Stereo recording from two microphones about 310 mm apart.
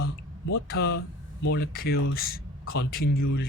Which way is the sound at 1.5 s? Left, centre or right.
Left.